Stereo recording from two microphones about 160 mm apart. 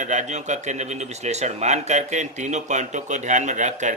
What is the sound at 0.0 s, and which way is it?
Speech, 50° right (ahead or behind).